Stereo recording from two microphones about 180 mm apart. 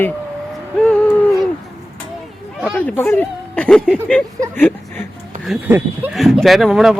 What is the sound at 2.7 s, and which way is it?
Speech, 10° left (ahead or behind).